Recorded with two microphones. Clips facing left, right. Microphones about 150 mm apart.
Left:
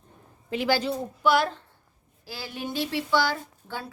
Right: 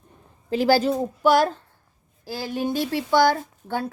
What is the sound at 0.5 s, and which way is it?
A woman's voice, 40° right (ahead or behind).